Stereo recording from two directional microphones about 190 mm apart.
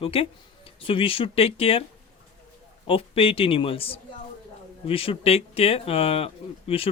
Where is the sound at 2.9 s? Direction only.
30° left (ahead or behind).